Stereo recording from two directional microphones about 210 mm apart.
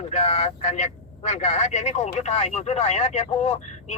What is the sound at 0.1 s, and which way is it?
Speech, 30° left (ahead or behind).